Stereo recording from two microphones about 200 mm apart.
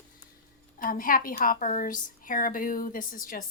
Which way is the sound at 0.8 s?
45° left (ahead or behind).